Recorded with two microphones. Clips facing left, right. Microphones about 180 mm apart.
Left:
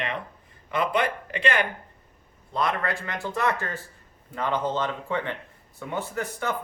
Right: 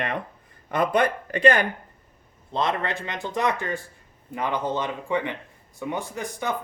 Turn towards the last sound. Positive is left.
turn(degrees=-15)  # may be behind; listen again after turning